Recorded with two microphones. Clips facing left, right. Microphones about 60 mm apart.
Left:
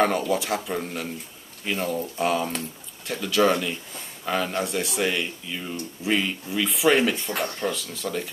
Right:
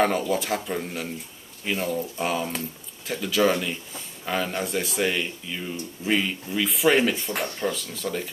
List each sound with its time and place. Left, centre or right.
0.3 s speech: centre